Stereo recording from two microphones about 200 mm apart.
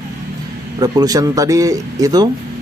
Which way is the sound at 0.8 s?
20° right (ahead or behind).